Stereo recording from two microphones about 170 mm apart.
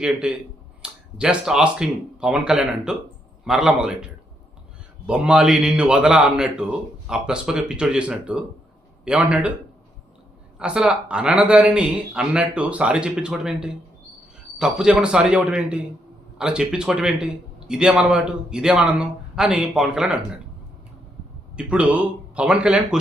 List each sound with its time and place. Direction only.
0.0 s a man's voice: 5° right (ahead or behind)
10.6 s a man's voice: 5° right (ahead or behind)
21.5 s speech: 5° right (ahead or behind)